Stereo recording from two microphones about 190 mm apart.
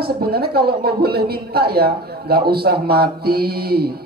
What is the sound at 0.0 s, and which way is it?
A woman's voice, 55° right (ahead or behind).